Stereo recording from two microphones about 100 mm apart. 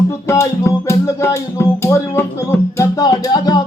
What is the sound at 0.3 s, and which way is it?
Music, 30° left (ahead or behind).